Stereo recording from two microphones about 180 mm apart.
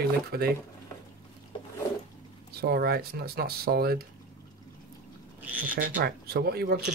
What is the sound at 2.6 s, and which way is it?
Speech, 60° right (ahead or behind).